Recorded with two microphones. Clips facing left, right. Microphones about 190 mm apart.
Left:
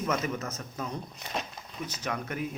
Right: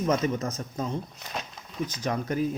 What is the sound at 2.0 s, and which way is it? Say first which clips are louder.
Speech: right 6 dB; 30° right (ahead or behind).